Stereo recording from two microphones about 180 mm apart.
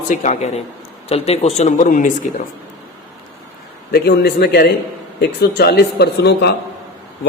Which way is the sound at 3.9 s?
60° left (ahead or behind).